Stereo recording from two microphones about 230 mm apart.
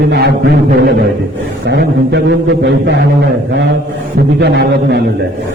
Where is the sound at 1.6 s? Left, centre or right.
Right.